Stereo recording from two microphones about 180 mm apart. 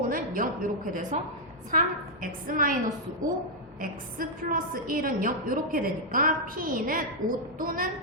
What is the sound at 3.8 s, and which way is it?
A woman's voice, 50° right (ahead or behind).